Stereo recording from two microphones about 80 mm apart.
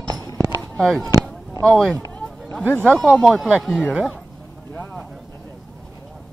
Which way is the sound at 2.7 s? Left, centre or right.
Centre.